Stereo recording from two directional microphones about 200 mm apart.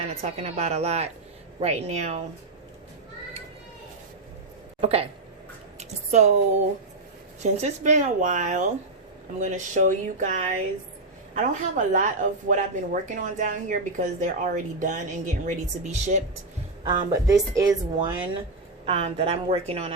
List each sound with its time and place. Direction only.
0.1 s a woman's voice: 35° right (ahead or behind)
4.8 s speech: 30° right (ahead or behind)
6.1 s a woman's voice: 35° right (ahead or behind)
7.4 s a woman's voice: 35° right (ahead or behind)
16.8 s a woman's voice: 15° right (ahead or behind)